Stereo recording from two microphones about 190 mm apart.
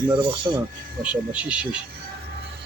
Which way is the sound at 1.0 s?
5° right (ahead or behind).